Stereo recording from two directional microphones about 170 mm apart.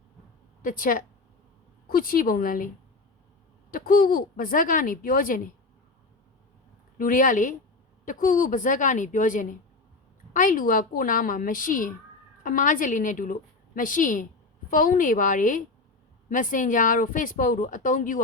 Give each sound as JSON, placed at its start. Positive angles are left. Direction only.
{"t": 0.6, "sound": "a woman's voice", "side_deg": 55}
{"t": 3.7, "sound": "speech", "side_deg": 55}
{"t": 7.0, "sound": "a woman's voice", "side_deg": 50}